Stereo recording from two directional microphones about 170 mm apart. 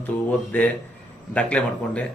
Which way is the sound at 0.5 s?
10° left (ahead or behind).